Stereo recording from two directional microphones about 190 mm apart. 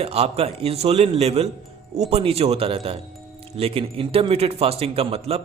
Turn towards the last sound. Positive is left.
turn(degrees=-30)  # may be behind; listen again after turning